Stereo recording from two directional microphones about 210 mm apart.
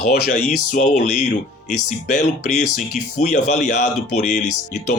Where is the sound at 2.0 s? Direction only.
40° left (ahead or behind).